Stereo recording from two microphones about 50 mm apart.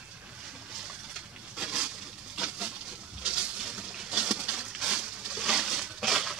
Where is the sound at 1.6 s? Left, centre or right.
Right.